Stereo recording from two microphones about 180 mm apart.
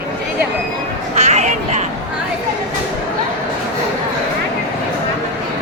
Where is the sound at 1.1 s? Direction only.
40° right (ahead or behind).